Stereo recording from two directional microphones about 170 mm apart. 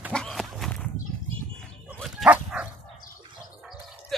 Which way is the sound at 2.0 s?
5° right (ahead or behind).